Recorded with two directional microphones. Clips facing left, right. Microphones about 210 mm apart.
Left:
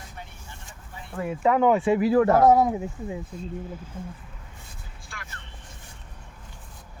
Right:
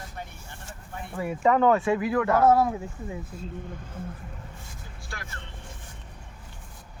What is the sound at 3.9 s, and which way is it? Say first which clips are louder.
Speech: right 1 dB; 10° right (ahead or behind).